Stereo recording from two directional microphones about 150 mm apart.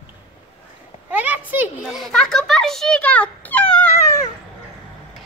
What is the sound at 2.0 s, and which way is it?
A child's voice, 5° left (ahead or behind).